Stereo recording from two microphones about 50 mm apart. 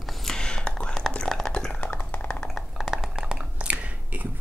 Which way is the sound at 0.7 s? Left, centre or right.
Centre.